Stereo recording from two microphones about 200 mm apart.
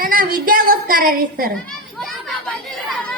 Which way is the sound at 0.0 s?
45° right (ahead or behind).